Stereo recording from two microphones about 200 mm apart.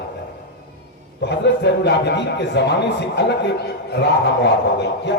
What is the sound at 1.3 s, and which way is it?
A man's voice, 60° left (ahead or behind).